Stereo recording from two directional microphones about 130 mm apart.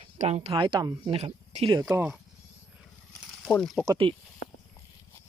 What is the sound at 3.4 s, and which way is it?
Speech, 5° left (ahead or behind).